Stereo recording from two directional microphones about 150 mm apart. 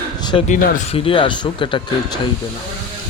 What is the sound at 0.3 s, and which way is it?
Speech, 35° left (ahead or behind).